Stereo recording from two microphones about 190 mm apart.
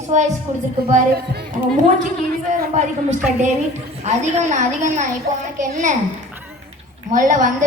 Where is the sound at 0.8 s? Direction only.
55° right (ahead or behind).